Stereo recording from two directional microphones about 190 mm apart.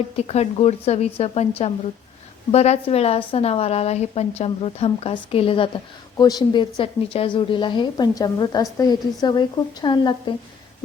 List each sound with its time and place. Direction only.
0.2 s a woman's voice: 35° left (ahead or behind)